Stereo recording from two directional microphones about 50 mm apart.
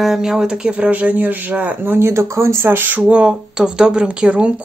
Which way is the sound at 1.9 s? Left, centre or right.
Right.